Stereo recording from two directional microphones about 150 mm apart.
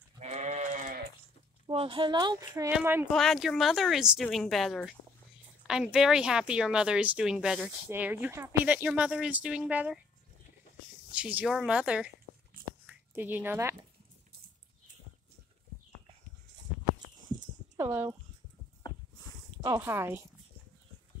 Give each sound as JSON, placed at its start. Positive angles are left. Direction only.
{"t": 0.2, "sound": "goat", "side_deg": -50}
{"t": 1.7, "sound": "speech", "side_deg": -40}
{"t": 2.7, "sound": "speech", "side_deg": -15}
{"t": 3.1, "sound": "speech", "side_deg": 0}
{"t": 11.1, "sound": "speech", "side_deg": -10}
{"t": 12.8, "sound": "a sound", "side_deg": -10}
{"t": 17.7, "sound": "speech", "side_deg": -15}
{"t": 19.6, "sound": "speech", "side_deg": -20}